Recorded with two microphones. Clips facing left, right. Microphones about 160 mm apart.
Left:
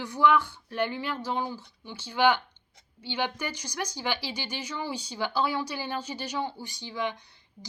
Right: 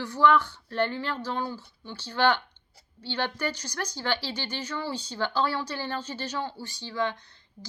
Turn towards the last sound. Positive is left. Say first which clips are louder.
# right 2 dB
turn(degrees=15)  # may be behind; listen again after turning